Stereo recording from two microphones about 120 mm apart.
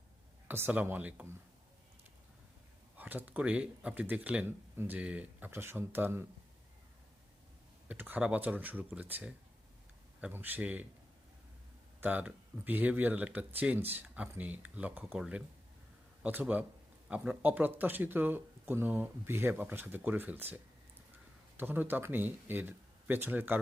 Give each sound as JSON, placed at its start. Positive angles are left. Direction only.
{"t": 0.4, "sound": "speech", "side_deg": -15}
{"t": 3.0, "sound": "speech", "side_deg": -15}
{"t": 7.9, "sound": "speech", "side_deg": -15}
{"t": 11.9, "sound": "speech", "side_deg": -15}
{"t": 21.6, "sound": "speech", "side_deg": -15}